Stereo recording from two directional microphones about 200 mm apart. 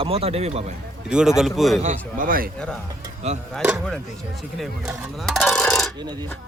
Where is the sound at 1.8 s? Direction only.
40° right (ahead or behind).